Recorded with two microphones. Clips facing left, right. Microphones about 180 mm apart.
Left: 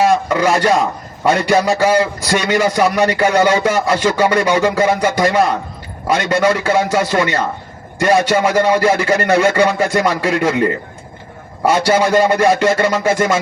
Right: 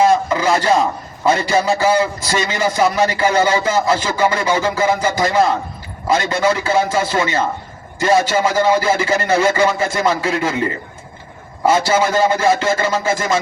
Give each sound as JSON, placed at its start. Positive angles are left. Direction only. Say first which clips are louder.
{"t": 0.3, "sound": "a man's voice", "louder": "left 2 dB", "side_deg": 70}